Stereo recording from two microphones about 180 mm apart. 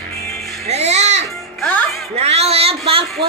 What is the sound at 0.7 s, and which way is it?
Babbling, 40° right (ahead or behind).